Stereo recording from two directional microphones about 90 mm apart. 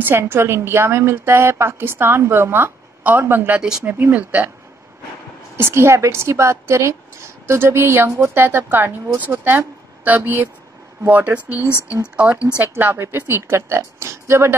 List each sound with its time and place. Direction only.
0.0 s a woman's voice: 25° right (ahead or behind)
5.6 s a woman's voice: 25° right (ahead or behind); by 12.4 s 10° right (ahead or behind)
12.5 s a woman's voice: 25° right (ahead or behind)